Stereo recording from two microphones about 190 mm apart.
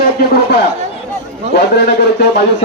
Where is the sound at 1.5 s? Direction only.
60° left (ahead or behind).